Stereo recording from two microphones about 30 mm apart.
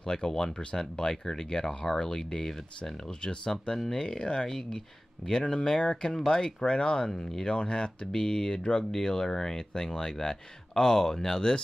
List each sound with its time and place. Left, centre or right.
0.0 s speech: left
3.7 s speech: centre
4.0 s speech: left
4.5 s speech: centre